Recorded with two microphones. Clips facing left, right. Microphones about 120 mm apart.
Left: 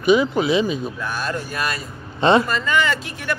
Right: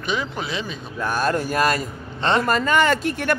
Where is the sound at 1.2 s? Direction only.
45° right (ahead or behind).